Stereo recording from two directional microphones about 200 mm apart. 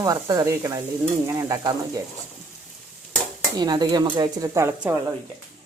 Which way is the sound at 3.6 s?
20° right (ahead or behind).